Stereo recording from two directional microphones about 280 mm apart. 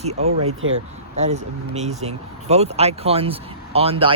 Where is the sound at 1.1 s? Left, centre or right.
Right.